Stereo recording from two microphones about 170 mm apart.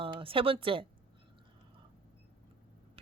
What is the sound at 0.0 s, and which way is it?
Speech, 30° right (ahead or behind).